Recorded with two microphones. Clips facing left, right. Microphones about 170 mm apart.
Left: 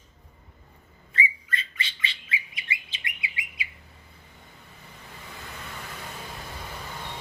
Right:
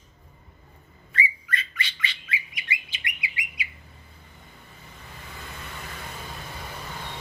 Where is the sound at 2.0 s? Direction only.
25° left (ahead or behind).